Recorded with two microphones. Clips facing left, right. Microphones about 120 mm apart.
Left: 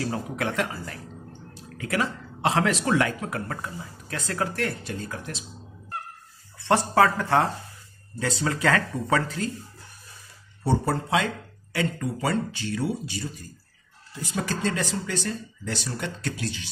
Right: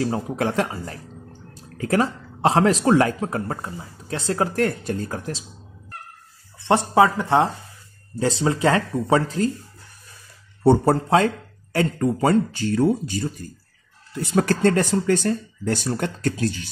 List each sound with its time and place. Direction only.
0.0 s speech: 30° right (ahead or behind)
6.9 s speech: 20° right (ahead or behind)
10.6 s speech: 55° right (ahead or behind)